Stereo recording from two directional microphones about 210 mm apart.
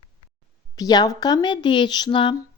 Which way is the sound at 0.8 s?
20° left (ahead or behind).